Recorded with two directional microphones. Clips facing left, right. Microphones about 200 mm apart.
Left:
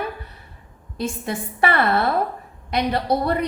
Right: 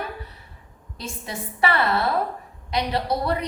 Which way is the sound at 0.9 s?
50° left (ahead or behind).